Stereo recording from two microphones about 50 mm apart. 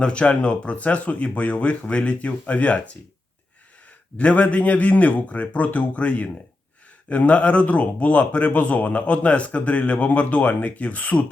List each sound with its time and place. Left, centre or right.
0.0 s a man's voice: left
4.2 s a man's voice: left